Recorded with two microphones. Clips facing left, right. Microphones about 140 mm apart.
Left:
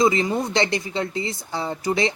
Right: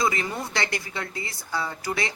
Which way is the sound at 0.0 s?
20° left (ahead or behind).